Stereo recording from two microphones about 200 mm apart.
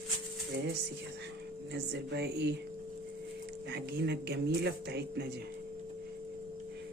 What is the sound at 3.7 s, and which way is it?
Speech, 55° right (ahead or behind).